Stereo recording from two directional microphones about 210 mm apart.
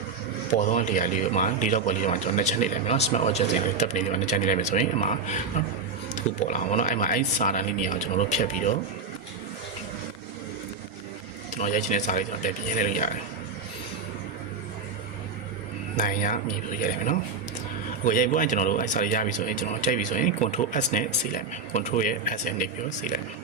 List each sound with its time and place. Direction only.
0.5 s a man's voice: 35° left (ahead or behind)
11.5 s a man's voice: 35° left (ahead or behind)
16.0 s a man's voice: 40° left (ahead or behind)
18.0 s a man's voice: 40° left (ahead or behind)